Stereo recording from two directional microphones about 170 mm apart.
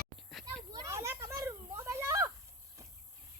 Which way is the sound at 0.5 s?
15° right (ahead or behind).